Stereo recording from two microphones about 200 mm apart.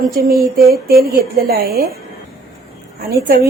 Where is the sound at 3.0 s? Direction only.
50° right (ahead or behind).